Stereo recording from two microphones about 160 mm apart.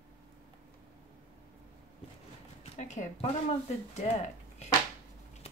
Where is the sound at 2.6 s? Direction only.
45° left (ahead or behind).